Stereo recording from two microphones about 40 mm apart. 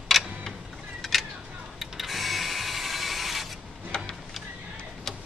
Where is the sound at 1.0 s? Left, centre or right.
Centre.